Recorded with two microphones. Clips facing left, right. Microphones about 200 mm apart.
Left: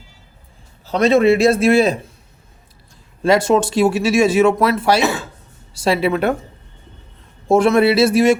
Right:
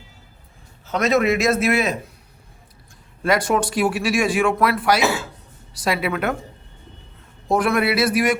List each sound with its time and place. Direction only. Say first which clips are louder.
0.9 s a man's voice: left 6 dB; 30° left (ahead or behind)
3.2 s speech: left 5 dB; 25° left (ahead or behind)
7.4 s speech: left 7 dB; 25° left (ahead or behind)